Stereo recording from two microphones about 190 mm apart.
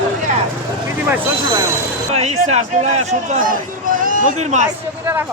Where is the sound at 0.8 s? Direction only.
15° right (ahead or behind).